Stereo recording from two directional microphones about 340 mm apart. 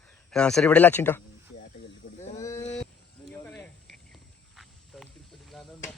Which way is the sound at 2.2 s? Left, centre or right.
Left.